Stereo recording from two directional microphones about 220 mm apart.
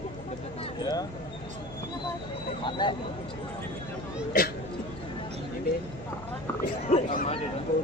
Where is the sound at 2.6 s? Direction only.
20° left (ahead or behind).